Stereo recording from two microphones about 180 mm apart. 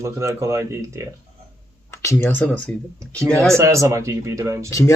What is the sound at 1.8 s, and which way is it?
Speech, 15° left (ahead or behind).